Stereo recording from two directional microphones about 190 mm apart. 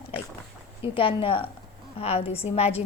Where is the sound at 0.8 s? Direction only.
25° left (ahead or behind).